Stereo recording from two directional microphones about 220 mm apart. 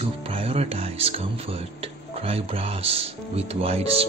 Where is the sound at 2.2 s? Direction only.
25° right (ahead or behind).